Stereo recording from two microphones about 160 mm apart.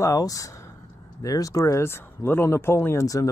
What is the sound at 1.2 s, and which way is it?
Speech, 20° left (ahead or behind).